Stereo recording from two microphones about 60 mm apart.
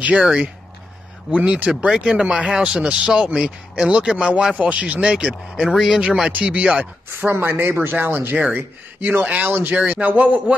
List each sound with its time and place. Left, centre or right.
0.0 s speech: right
1.9 s speech: centre
7.2 s speech: right